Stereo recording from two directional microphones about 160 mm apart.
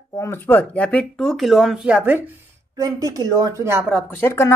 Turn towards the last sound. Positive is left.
turn(degrees=15)  # may be behind; listen again after turning